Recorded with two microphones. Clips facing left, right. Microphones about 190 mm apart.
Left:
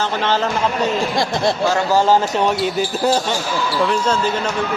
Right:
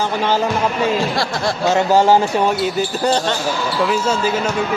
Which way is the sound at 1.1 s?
20° left (ahead or behind).